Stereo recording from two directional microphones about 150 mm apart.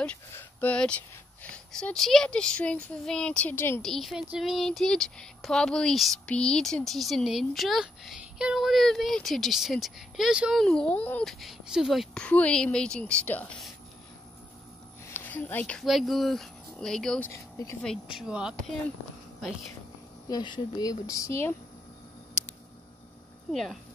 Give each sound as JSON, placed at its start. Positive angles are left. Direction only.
{"t": 0.3, "sound": "a child's voice", "side_deg": 15}
{"t": 3.8, "sound": "speech", "side_deg": 0}
{"t": 15.0, "sound": "speech", "side_deg": 10}
{"t": 17.3, "sound": "speech", "side_deg": 20}
{"t": 18.0, "sound": "speech", "side_deg": -5}
{"t": 20.2, "sound": "speech", "side_deg": 30}
{"t": 23.5, "sound": "speech", "side_deg": 0}